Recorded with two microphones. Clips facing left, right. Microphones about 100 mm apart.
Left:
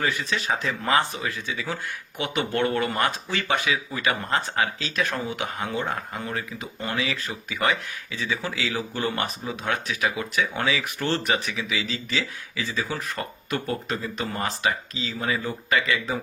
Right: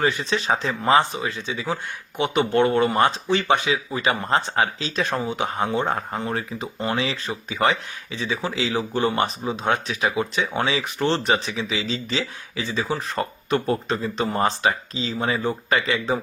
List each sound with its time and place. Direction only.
0.0 s speech: 30° right (ahead or behind)